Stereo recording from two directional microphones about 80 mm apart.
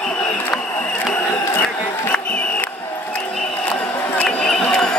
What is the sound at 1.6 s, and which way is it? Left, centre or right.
Crowd, centre.